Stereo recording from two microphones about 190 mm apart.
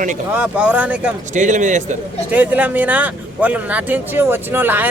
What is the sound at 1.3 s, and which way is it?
Speech, 40° right (ahead or behind).